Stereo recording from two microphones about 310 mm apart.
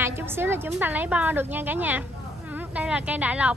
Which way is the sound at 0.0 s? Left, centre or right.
Centre.